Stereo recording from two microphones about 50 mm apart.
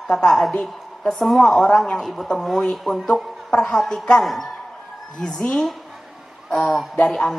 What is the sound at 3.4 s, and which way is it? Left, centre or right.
Speech, centre.